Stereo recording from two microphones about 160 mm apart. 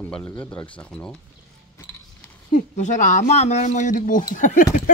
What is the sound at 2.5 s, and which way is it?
Speech, 50° left (ahead or behind).